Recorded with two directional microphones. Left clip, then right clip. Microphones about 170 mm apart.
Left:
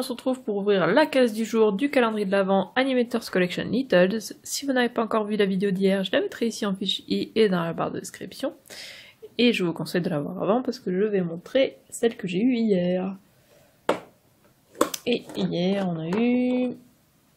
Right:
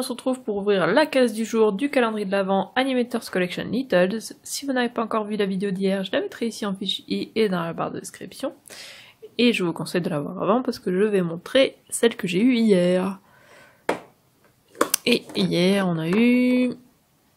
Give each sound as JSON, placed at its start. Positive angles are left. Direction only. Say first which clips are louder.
{"t": 0.0, "sound": "speech", "louder": "right 1 dB", "side_deg": -10}
{"t": 14.9, "sound": "a sound", "louder": "right 5 dB", "side_deg": -25}
{"t": 15.3, "sound": "speech", "louder": "right 5 dB", "side_deg": -25}